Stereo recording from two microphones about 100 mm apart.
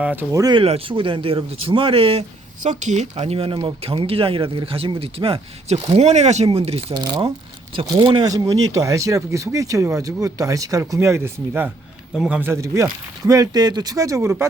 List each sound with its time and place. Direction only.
0.0 s speech: 15° right (ahead or behind)
0.3 s speech: 30° right (ahead or behind)
0.5 s speech: 70° right (ahead or behind)
3.0 s speech: 90° right
6.9 s speech: 45° right (ahead or behind)
8.3 s speech: 35° right (ahead or behind)
12.1 s speech: 5° right (ahead or behind)
12.4 s speech: 30° right (ahead or behind)
14.2 s speech: 25° right (ahead or behind)